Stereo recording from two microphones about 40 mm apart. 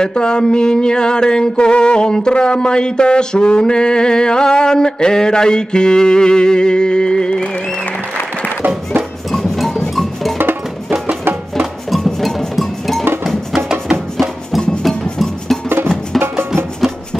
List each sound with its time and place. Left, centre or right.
0.0 s a sound: centre
9.3 s music: centre
11.9 s music: centre
14.6 s music: centre
14.9 s music: centre
16.2 s music: right